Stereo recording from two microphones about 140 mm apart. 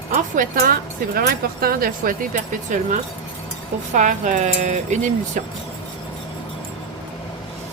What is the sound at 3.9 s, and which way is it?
Speech, 60° right (ahead or behind).